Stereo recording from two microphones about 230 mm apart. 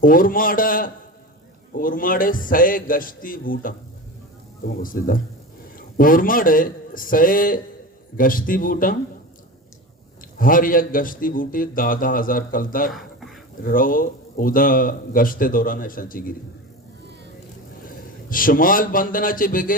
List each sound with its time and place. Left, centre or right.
0.0 s a man's voice: left
10.3 s a man's voice: left
12.9 s a sound: centre
13.6 s a man's voice: left
17.8 s a man's voice: left